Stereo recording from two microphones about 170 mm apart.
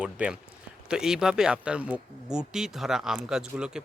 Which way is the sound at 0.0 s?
5° right (ahead or behind).